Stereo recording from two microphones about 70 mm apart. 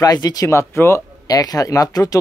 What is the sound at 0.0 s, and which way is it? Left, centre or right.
Speech, left.